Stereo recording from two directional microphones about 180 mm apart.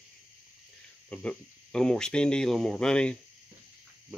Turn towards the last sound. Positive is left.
turn(degrees=5)  # may be behind; listen again after turning